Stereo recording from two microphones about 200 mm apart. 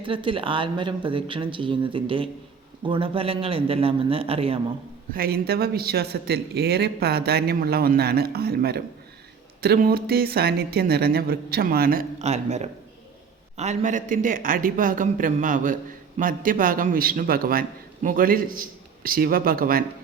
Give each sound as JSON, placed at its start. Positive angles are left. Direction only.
{"t": 0.0, "sound": "speech", "side_deg": -25}
{"t": 5.1, "sound": "a man's voice", "side_deg": -50}
{"t": 12.2, "sound": "a man's voice", "side_deg": -35}